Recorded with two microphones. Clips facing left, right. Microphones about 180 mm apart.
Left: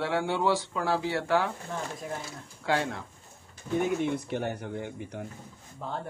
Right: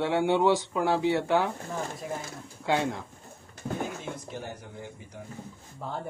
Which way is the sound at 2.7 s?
20° right (ahead or behind).